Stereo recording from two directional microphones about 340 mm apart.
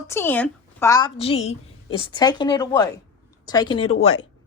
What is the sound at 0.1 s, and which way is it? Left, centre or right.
A woman's voice, centre.